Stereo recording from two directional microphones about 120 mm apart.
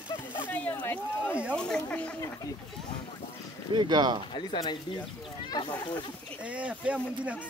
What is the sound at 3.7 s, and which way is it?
Speech, 35° right (ahead or behind).